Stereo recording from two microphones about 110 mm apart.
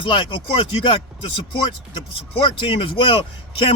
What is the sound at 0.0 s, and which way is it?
Speech, 50° left (ahead or behind).